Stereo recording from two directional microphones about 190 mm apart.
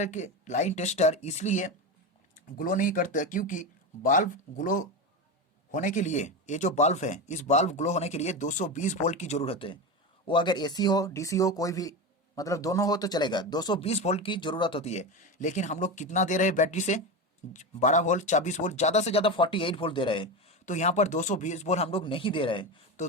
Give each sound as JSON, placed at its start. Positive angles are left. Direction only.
{"t": 0.0, "sound": "speech", "side_deg": 40}
{"t": 20.7, "sound": "speech", "side_deg": 40}